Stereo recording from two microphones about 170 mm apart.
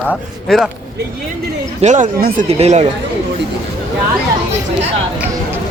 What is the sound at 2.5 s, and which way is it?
Speech, 40° right (ahead or behind).